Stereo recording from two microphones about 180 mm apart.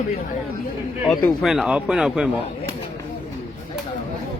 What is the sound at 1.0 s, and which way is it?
Speech, centre (ahead or behind).